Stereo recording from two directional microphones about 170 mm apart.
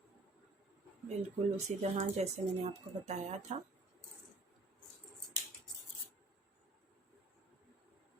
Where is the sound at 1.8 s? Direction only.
40° right (ahead or behind).